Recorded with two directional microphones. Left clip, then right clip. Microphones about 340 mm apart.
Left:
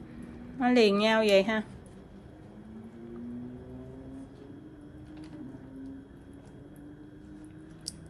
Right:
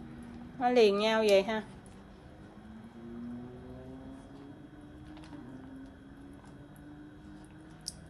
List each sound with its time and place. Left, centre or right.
0.6 s a woman's voice: left